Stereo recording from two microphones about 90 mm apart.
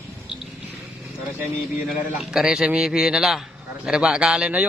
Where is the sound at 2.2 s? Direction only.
5° right (ahead or behind).